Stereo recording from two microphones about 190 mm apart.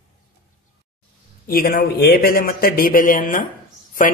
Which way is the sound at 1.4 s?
50° left (ahead or behind).